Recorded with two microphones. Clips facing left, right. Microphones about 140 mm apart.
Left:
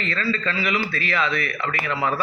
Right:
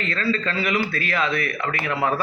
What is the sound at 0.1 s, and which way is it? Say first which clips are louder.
A man's voice: right 1 dB; 50° right (ahead or behind).